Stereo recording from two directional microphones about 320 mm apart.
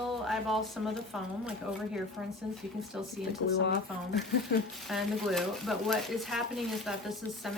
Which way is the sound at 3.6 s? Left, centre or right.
Left.